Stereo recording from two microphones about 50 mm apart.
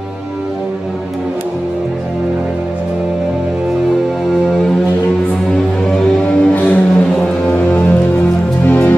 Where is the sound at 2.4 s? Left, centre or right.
Centre.